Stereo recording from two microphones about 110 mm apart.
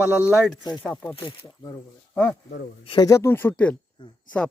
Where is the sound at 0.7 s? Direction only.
40° left (ahead or behind).